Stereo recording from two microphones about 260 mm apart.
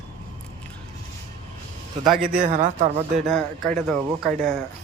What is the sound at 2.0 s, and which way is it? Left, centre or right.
Speech, centre.